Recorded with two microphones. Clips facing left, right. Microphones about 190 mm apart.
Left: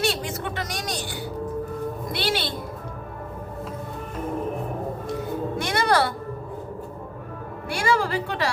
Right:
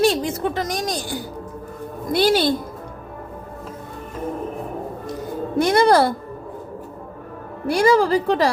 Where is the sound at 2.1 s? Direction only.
40° right (ahead or behind).